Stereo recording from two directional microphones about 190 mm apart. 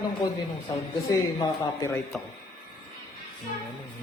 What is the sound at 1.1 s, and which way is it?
Speech, 15° left (ahead or behind).